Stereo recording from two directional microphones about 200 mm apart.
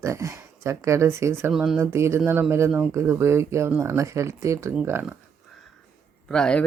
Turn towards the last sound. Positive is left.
turn(degrees=5)  # may be behind; listen again after turning